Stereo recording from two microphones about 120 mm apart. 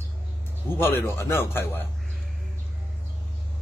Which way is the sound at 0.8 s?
20° left (ahead or behind).